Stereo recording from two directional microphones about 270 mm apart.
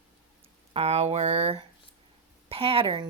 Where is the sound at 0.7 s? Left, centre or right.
Right.